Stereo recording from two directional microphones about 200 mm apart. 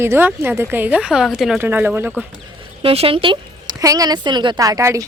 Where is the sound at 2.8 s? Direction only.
25° right (ahead or behind).